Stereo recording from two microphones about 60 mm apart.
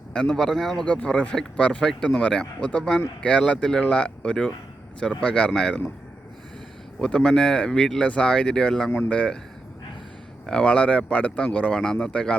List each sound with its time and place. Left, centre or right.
0.1 s speech: centre
0.9 s speech: centre
1.8 s speech: centre
7.0 s speech: centre
10.4 s speech: centre